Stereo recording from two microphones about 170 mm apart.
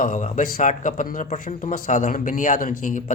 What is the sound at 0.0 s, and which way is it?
A man's voice, 55° left (ahead or behind).